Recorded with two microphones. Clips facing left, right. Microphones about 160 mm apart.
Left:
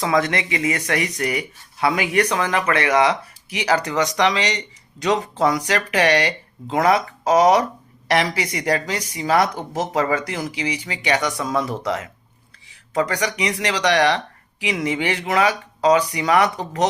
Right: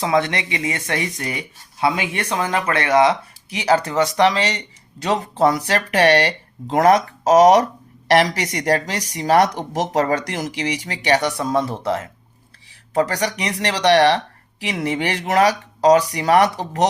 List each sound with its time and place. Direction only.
0.0 s speech: 30° right (ahead or behind)
5.0 s speech: 40° right (ahead or behind)